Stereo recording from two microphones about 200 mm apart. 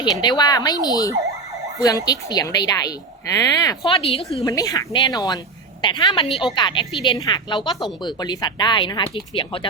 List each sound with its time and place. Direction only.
0.0 s speech: 20° left (ahead or behind)
4.4 s speech: 15° left (ahead or behind)